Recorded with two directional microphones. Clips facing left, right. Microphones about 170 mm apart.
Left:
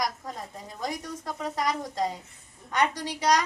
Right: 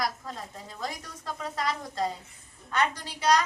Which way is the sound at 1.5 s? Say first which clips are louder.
Left 2 dB; 15° left (ahead or behind).